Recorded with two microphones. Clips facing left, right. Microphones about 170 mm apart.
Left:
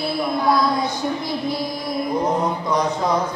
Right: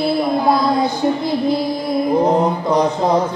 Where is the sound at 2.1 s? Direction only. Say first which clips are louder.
Right 6 dB; 30° right (ahead or behind).